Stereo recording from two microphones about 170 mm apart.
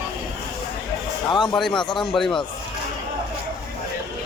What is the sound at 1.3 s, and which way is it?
Speech, 25° left (ahead or behind).